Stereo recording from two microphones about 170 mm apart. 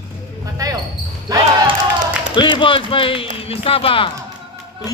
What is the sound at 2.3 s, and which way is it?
Speech, 25° left (ahead or behind).